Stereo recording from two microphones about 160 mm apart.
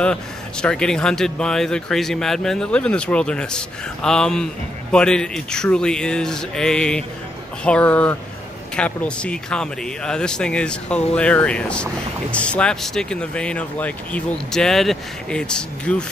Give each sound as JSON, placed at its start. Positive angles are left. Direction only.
{"t": 0.0, "sound": "speech", "side_deg": 5}